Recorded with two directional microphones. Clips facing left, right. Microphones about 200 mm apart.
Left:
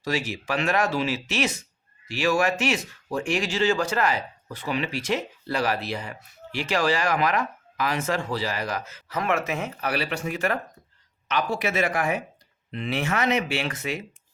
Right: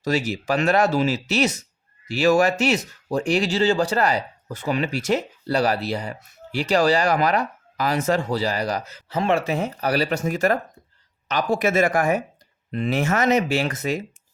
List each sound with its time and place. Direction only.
0.0 s speech: 40° right (ahead or behind)